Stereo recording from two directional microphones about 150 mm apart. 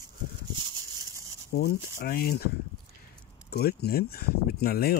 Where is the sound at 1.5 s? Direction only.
80° left.